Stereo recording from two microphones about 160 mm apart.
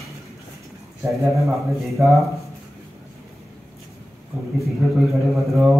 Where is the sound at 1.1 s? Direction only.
Centre (ahead or behind).